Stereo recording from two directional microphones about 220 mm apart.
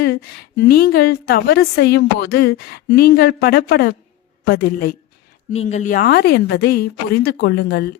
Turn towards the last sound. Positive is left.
turn(degrees=45)  # may be behind; listen again after turning